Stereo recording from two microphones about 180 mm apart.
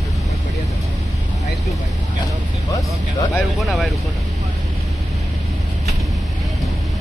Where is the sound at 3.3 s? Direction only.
Centre (ahead or behind).